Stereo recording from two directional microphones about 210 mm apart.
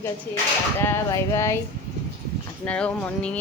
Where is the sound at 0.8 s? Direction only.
10° left (ahead or behind).